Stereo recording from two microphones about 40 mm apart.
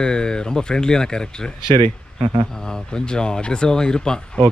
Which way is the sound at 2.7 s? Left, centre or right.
Centre.